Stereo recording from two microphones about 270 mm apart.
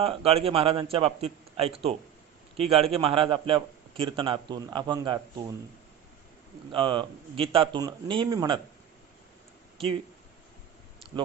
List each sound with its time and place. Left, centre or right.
0.0 s a man's voice: right
6.7 s speech: centre